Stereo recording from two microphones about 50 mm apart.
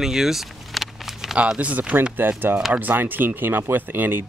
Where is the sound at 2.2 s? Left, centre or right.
Right.